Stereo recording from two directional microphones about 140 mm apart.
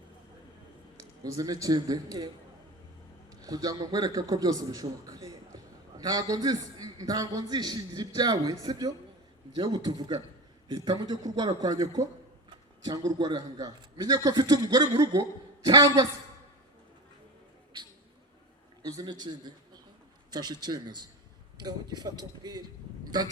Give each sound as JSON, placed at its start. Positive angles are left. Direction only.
{"t": 0.9, "sound": "a man's voice", "side_deg": -25}
{"t": 3.4, "sound": "a man's voice", "side_deg": -25}
{"t": 10.8, "sound": "a man's voice", "side_deg": -45}
{"t": 11.1, "sound": "a man's voice", "side_deg": -30}
{"t": 18.8, "sound": "a man's voice", "side_deg": -25}